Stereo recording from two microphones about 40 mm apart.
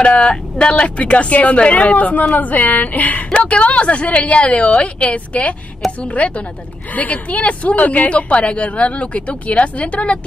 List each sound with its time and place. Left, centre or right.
0.0 s a woman's voice: left
3.3 s speech: left